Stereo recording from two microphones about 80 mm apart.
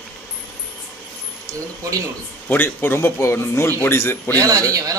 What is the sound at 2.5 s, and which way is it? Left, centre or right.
Speech, left.